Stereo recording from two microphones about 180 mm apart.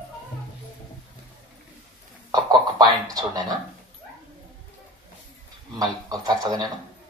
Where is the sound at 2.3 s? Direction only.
20° right (ahead or behind).